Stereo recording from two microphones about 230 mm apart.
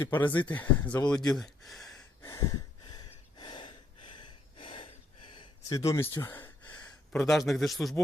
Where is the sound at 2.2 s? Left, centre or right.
Centre.